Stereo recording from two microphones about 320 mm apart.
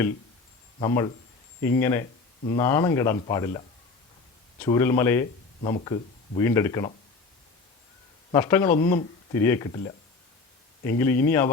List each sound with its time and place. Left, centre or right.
0.8 s speech: centre
4.6 s speech: centre
8.3 s speech: centre